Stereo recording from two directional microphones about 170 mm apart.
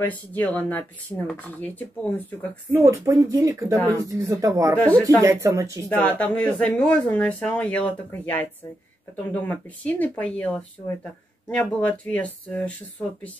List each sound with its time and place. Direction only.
0.0 s speech: 10° left (ahead or behind)
2.7 s speech: 15° right (ahead or behind)
3.8 s speech: 10° left (ahead or behind)
4.1 s speech: 20° right (ahead or behind)
4.7 s speech: 10° left (ahead or behind)
5.2 s speech: 15° right (ahead or behind)
5.9 s speech: 10° left (ahead or behind)